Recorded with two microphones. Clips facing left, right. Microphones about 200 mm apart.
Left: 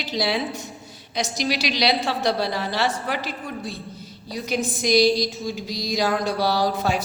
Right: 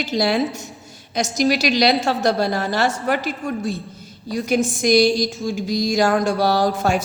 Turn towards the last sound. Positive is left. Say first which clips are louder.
# right 4 dB
turn(degrees=-50)  # may be behind; listen again after turning